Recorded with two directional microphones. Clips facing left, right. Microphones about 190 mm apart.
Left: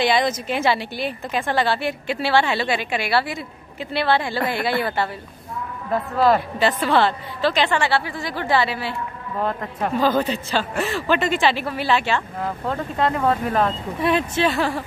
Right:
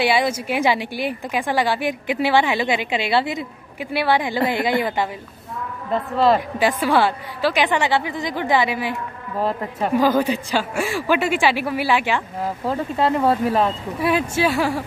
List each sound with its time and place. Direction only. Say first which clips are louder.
0.0 s a man's voice: even; 10° right (ahead or behind)
6.1 s a woman's voice: right 1 dB; centre (ahead or behind)
6.6 s a man's voice: right 1 dB; 10° right (ahead or behind)